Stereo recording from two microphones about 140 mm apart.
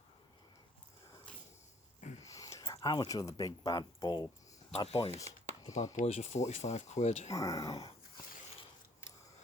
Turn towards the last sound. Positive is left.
turn(degrees=25)  # may be behind; listen again after turning